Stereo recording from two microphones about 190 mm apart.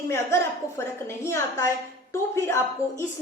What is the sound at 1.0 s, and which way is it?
Speech, 15° left (ahead or behind).